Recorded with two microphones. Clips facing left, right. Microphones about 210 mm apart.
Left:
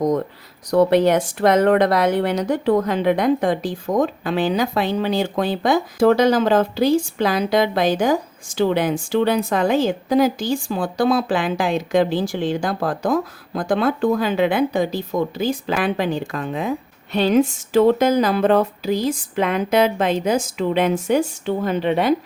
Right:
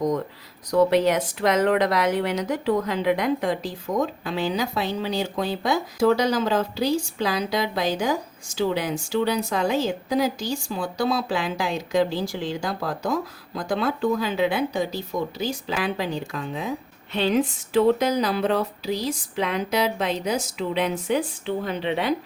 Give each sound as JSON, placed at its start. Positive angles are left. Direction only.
{"t": 0.7, "sound": "speech", "side_deg": 60}